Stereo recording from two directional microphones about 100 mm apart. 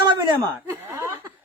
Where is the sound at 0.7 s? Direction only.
25° right (ahead or behind).